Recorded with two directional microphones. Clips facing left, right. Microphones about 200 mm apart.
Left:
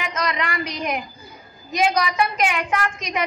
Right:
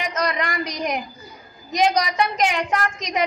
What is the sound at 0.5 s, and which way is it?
A woman's voice, 40° right (ahead or behind).